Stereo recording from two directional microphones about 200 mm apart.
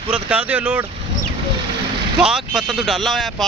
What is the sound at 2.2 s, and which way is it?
Speech, 5° right (ahead or behind).